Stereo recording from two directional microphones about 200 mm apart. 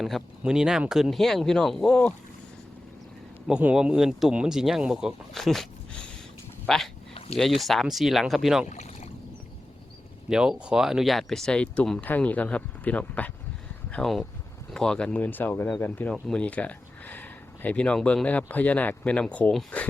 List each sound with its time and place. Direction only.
0.0 s speech: centre (ahead or behind)
3.4 s speech: 5° right (ahead or behind)
7.1 s a sound: 30° left (ahead or behind)
7.3 s speech: centre (ahead or behind)
8.7 s boat: 35° left (ahead or behind)
10.2 s speech: 5° right (ahead or behind)